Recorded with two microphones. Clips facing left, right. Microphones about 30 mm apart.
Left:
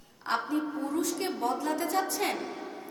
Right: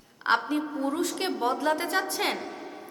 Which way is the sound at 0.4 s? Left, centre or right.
Right.